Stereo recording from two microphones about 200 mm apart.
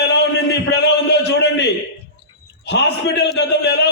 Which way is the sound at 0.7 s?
55° left (ahead or behind).